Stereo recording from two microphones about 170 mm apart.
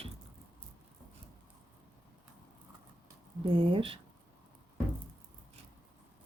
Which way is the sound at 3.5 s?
30° right (ahead or behind).